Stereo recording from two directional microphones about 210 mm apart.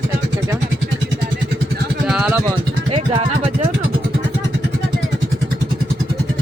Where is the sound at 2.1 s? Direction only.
5° right (ahead or behind).